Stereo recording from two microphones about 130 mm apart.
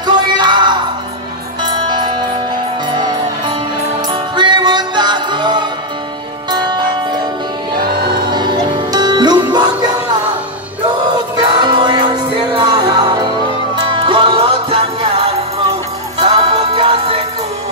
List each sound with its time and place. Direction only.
0.0 s music: 35° right (ahead or behind)
8.3 s music: 35° right (ahead or behind)
11.6 s music: 35° right (ahead or behind)